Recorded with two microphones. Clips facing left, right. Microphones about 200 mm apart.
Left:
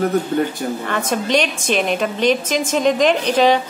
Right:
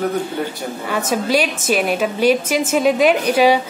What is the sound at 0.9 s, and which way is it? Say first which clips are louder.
A woman's voice: right 2 dB; 5° right (ahead or behind).